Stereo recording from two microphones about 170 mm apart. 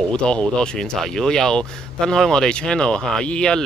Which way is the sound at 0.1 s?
5° left (ahead or behind).